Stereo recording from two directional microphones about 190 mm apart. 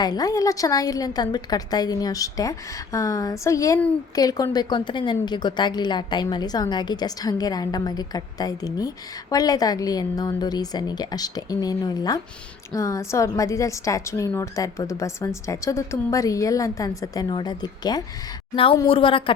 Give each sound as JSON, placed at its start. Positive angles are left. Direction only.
{"t": 0.0, "sound": "a woman's voice", "side_deg": 20}